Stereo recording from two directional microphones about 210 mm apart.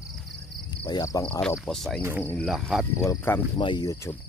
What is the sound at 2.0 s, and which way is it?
Speech, 10° right (ahead or behind).